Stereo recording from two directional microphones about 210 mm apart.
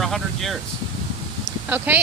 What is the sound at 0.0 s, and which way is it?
Air conditioning, centre (ahead or behind).